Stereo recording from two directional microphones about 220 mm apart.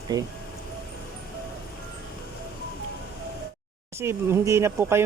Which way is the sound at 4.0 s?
10° right (ahead or behind).